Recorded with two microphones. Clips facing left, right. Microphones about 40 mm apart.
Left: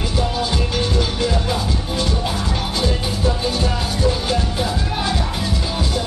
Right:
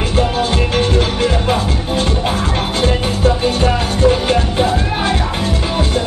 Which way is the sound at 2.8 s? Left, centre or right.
Right.